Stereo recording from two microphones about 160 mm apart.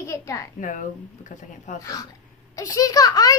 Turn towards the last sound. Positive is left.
turn(degrees=20)  # may be behind; listen again after turning